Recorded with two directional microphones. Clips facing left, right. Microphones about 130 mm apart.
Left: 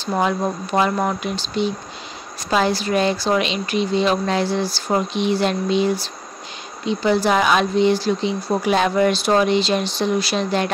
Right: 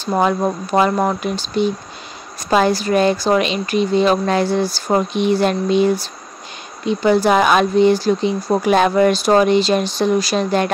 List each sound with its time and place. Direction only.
0.0 s speech: 45° right (ahead or behind)